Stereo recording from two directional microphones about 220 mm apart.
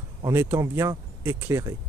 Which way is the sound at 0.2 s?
10° right (ahead or behind).